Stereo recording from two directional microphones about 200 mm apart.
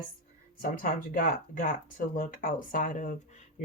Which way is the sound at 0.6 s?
45° left (ahead or behind).